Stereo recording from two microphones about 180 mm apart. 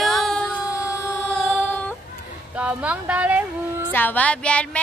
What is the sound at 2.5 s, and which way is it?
Speech, 5° right (ahead or behind).